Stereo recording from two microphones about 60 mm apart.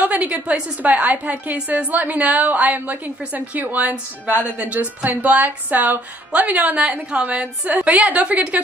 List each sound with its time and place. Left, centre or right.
0.0 s a woman's voice: right